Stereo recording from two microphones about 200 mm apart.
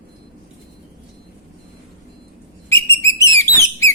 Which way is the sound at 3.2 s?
15° left (ahead or behind).